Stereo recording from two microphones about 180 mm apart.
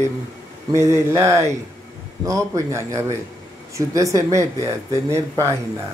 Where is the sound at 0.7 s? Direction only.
15° right (ahead or behind).